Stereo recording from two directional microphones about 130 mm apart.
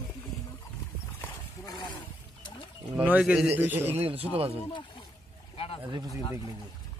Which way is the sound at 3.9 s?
50° right (ahead or behind).